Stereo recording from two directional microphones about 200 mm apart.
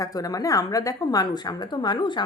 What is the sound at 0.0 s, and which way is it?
A woman's voice, 20° left (ahead or behind).